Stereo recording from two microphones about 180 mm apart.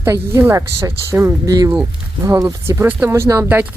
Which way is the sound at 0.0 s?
15° right (ahead or behind).